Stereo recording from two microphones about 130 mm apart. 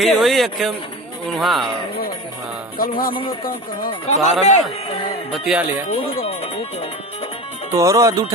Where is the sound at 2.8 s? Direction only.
90° left.